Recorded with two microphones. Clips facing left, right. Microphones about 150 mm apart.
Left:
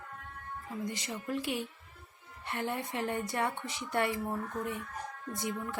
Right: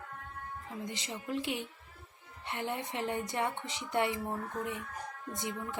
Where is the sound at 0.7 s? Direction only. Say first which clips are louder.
Left 3 dB; 20° right (ahead or behind).